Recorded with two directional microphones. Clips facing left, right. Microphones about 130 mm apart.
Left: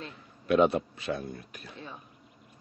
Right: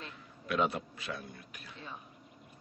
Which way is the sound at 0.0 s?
25° left (ahead or behind).